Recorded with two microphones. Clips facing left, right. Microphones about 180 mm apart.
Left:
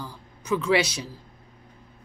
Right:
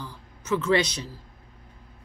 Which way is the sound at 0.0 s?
15° left (ahead or behind).